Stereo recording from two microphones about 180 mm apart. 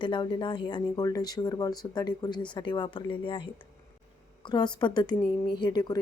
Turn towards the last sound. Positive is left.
turn(degrees=25)  # may be behind; listen again after turning